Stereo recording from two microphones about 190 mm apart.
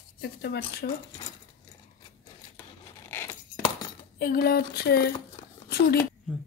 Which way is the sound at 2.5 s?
10° left (ahead or behind).